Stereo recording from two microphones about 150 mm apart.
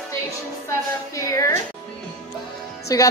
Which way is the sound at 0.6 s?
20° left (ahead or behind).